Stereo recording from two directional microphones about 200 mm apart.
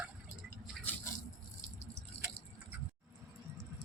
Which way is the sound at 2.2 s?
30° left (ahead or behind).